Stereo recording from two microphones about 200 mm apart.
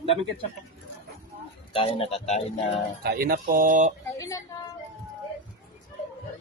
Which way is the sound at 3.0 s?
50° right (ahead or behind).